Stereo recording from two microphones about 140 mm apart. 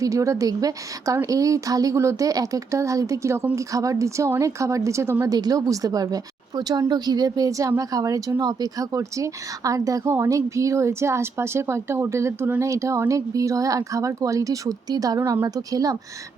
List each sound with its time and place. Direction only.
0.0 s speech: 20° right (ahead or behind)